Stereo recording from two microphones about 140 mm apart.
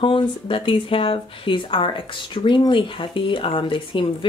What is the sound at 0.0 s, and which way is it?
Speech, 40° left (ahead or behind).